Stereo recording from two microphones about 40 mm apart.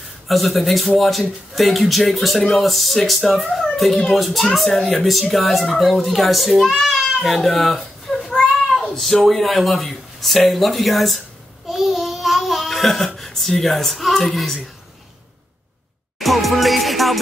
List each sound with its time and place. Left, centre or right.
0.3 s a child's voice: centre
11.7 s babbling: centre
16.2 s music: centre